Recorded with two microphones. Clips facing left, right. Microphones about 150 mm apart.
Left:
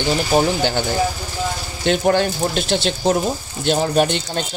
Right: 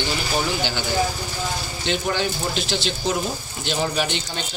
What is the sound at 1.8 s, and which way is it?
A man's voice, 50° left (ahead or behind).